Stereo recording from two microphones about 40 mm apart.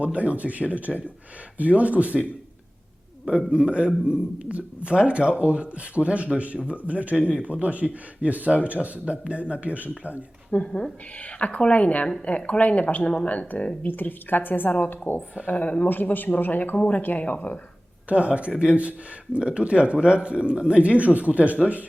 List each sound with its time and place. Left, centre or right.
0.0 s speech: right
3.2 s a man's voice: right
10.5 s speech: left
13.8 s a woman's voice: left
15.6 s speech: left
16.1 s a woman's voice: left
16.7 s speech: left
17.0 s a woman's voice: left
18.1 s speech: right